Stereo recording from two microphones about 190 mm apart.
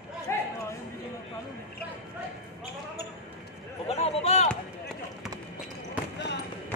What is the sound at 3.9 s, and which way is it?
Speech, 35° left (ahead or behind).